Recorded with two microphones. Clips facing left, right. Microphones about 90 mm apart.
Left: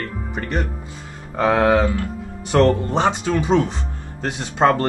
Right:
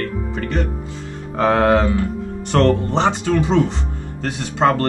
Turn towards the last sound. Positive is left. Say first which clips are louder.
# even
turn(degrees=20)  # may be behind; listen again after turning